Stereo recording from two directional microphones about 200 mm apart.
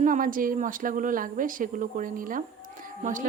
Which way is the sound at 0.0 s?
40° right (ahead or behind).